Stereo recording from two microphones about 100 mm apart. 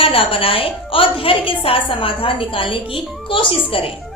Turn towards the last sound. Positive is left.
turn(degrees=65)  # may be behind; listen again after turning